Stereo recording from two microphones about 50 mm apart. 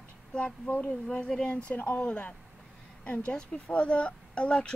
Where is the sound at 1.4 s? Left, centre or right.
Left.